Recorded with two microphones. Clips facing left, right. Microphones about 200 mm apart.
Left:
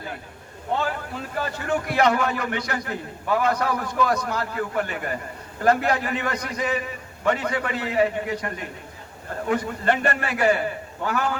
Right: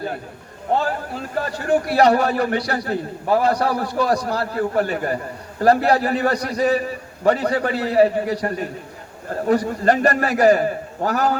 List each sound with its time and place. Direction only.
1.4 s a man's voice: 35° right (ahead or behind)